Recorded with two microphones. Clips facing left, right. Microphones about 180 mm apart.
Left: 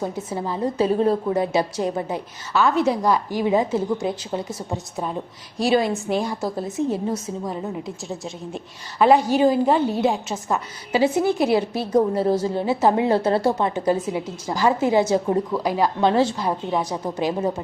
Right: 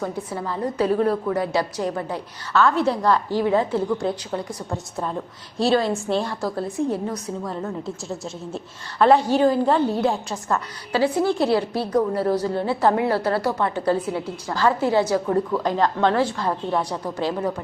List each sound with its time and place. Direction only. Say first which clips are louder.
0.0 s a woman's voice: left 1 dB; 20° left (ahead or behind)